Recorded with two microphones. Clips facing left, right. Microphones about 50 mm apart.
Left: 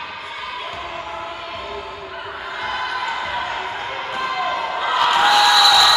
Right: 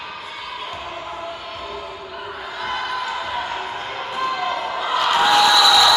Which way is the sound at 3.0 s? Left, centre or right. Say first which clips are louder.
Left 1 dB; left.